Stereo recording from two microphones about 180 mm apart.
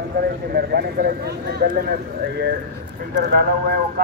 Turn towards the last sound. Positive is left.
turn(degrees=-55)  # may be behind; listen again after turning